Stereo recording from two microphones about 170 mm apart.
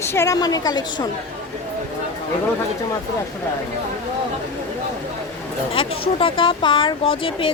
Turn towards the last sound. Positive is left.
turn(degrees=30)  # may be behind; listen again after turning